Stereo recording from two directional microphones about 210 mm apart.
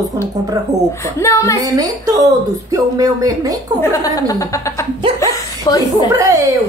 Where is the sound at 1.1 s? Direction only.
15° left (ahead or behind).